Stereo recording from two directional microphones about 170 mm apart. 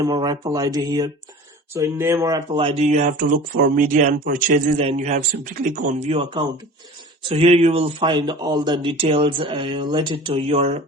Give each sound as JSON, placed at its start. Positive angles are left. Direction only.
{"t": 0.0, "sound": "speech", "side_deg": -25}
{"t": 4.8, "sound": "speech", "side_deg": -40}
{"t": 6.1, "sound": "speech", "side_deg": -35}